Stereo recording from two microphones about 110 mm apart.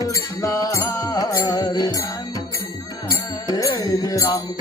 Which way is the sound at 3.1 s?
35° left (ahead or behind).